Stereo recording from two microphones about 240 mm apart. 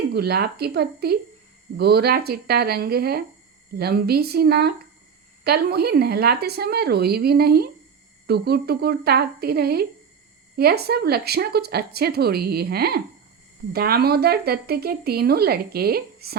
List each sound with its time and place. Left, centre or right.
0.1 s a woman's voice: right